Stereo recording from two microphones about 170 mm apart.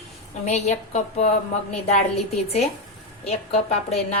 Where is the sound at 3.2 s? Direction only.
35° left (ahead or behind).